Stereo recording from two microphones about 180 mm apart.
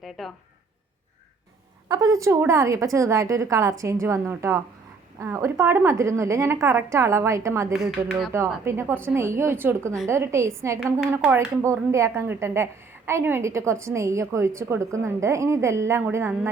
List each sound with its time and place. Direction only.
0.0 s speech: centre (ahead or behind)
1.9 s a woman's voice: 20° right (ahead or behind)
7.7 s speech: centre (ahead or behind)
8.6 s a woman's voice: 15° right (ahead or behind)